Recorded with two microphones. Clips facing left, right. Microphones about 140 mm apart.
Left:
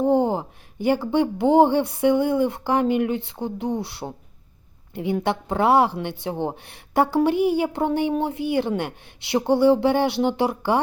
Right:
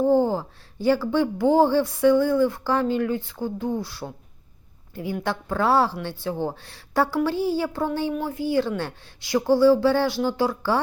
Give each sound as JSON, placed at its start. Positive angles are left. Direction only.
{"t": 0.0, "sound": "a woman's voice", "side_deg": 20}